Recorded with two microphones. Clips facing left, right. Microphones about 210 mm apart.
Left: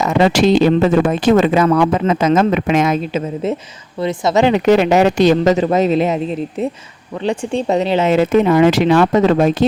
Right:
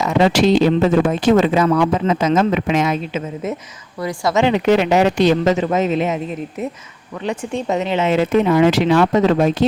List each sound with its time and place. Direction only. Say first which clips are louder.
0.0 s speech: left 2 dB; 50° left (ahead or behind)
4.4 s speech: left 3 dB; 45° left (ahead or behind)
7.3 s speech: left 4 dB; 30° left (ahead or behind); by 9.6 s 50° left (ahead or behind)